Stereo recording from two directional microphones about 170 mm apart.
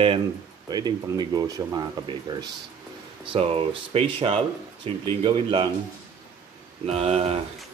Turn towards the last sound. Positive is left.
turn(degrees=-40)  # may be behind; listen again after turning